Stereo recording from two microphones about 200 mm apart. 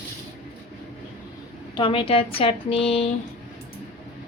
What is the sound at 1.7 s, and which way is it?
Speech, 25° left (ahead or behind).